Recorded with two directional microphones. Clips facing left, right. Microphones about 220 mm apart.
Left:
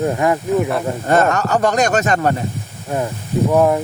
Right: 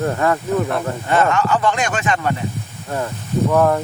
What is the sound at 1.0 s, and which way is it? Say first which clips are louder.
Speech: left 2 dB; 40° left (ahead or behind).